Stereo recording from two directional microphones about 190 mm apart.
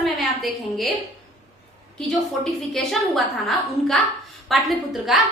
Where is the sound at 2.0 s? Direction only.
Centre (ahead or behind).